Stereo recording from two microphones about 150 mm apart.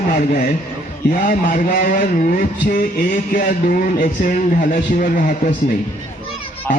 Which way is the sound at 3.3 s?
60° left (ahead or behind).